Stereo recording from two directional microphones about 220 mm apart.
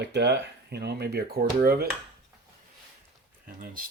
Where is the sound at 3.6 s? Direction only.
40° right (ahead or behind).